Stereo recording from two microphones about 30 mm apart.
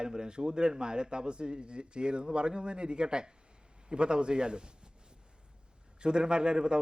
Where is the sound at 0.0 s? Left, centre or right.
Right.